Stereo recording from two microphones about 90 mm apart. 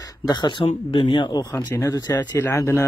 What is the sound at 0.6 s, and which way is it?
Speech, 90° left.